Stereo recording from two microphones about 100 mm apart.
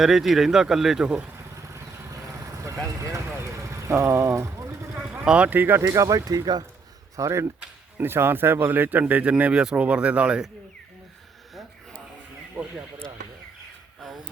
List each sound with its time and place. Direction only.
0.0 s speech: centre (ahead or behind)
1.5 s vehicle: 30° right (ahead or behind)
5.2 s speech: 10° right (ahead or behind)
5.8 s speech: 35° right (ahead or behind)
7.2 s speech: 30° right (ahead or behind); by 10.5 s 10° right (ahead or behind)